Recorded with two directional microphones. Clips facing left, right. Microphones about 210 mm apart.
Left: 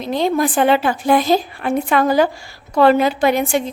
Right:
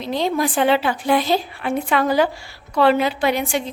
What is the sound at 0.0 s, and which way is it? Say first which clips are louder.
A woman's voice: left 3 dB; 50° left (ahead or behind).